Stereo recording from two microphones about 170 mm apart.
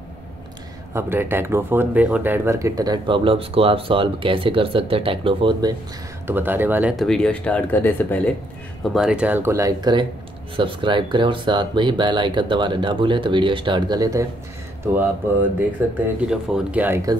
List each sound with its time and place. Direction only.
0.9 s speech: 15° right (ahead or behind)
6.2 s speech: 10° right (ahead or behind); by 8.2 s 10° left (ahead or behind)
8.9 s speech: 5° right (ahead or behind); by 14.2 s 20° right (ahead or behind)
16.2 s speech: 5° right (ahead or behind)